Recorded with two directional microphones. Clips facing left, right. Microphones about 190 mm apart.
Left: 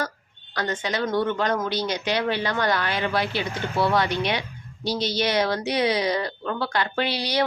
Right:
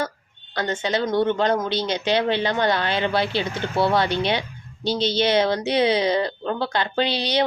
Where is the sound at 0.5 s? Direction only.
25° right (ahead or behind).